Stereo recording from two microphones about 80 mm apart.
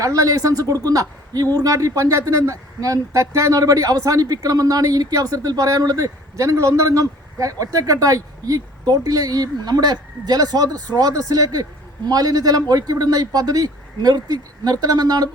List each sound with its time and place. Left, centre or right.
0.0 s speech: right